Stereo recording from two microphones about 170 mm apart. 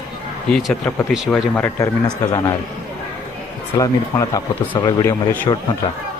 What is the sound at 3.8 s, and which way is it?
Speech, 20° left (ahead or behind).